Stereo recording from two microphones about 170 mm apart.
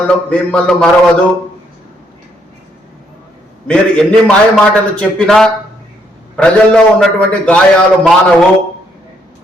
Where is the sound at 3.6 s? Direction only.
5° left (ahead or behind).